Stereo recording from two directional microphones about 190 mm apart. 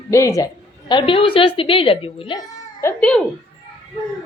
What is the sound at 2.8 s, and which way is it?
Speech, 5° left (ahead or behind).